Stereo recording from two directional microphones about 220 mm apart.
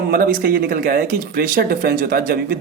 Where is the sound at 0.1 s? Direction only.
40° right (ahead or behind).